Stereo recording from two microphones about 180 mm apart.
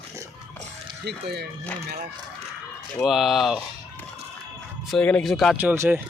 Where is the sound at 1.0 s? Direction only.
65° right (ahead or behind).